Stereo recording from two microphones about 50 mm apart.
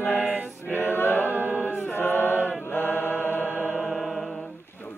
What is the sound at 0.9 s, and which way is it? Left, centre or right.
Choir, left.